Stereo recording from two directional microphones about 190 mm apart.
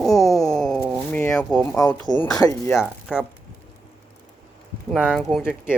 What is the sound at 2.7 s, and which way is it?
Speech, 5° right (ahead or behind).